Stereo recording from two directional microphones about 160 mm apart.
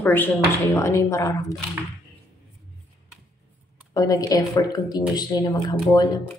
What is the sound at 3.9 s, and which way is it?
Speech, 20° left (ahead or behind).